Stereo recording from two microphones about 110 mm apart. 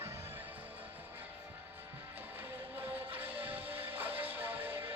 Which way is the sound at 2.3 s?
15° right (ahead or behind).